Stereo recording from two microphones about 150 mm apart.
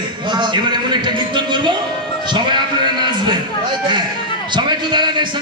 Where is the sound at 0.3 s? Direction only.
30° right (ahead or behind).